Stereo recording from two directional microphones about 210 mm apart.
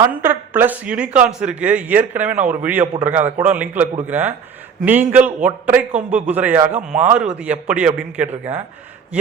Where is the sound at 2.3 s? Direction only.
35° right (ahead or behind).